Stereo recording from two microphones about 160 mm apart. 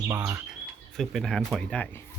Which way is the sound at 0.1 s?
15° right (ahead or behind).